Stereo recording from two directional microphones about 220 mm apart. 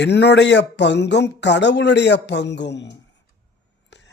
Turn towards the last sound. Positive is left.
turn(degrees=55)  # may be behind; listen again after turning